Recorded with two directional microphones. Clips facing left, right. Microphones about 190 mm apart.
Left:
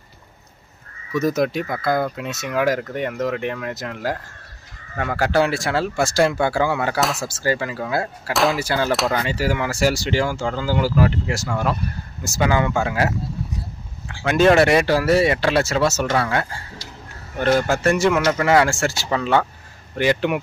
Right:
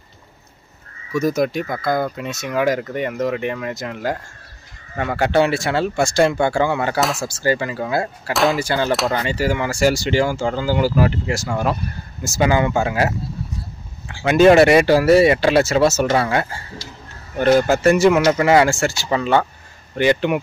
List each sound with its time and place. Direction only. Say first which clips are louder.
1.1 s speech: right 1 dB; centre (ahead or behind)
11.4 s speech: right 1 dB; 15° right (ahead or behind)
14.1 s speech: right 4 dB; 5° right (ahead or behind)
17.6 s speech: right 4 dB; 5° right (ahead or behind)